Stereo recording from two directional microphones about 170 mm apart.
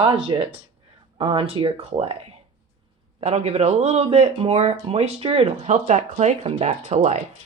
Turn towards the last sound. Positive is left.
turn(degrees=-40)  # may be behind; listen again after turning